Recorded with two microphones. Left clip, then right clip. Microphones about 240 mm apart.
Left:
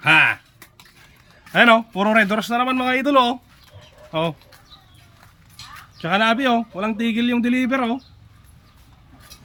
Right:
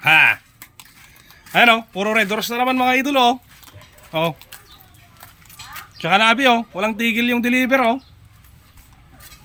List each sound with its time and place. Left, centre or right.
0.0 s speech: centre
1.5 s a man's voice: centre
6.0 s a man's voice: centre